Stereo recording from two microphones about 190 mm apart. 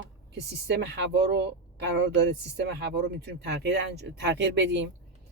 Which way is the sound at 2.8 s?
60° right (ahead or behind).